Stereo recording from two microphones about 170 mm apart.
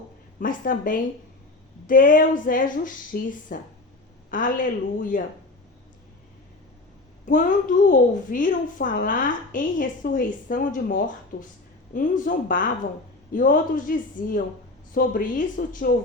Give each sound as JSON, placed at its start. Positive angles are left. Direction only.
{"t": 0.3, "sound": "a child's voice", "side_deg": 55}
{"t": 7.3, "sound": "a child's voice", "side_deg": 55}